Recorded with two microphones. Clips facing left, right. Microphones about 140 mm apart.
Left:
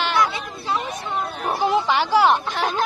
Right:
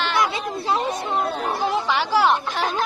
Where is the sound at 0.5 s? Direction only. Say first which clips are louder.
Right 3 dB; 30° right (ahead or behind).